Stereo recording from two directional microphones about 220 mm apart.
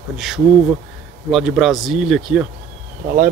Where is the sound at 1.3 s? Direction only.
Centre (ahead or behind).